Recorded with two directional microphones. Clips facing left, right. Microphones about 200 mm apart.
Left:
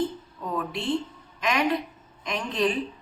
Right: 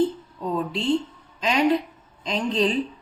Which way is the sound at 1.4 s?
30° right (ahead or behind).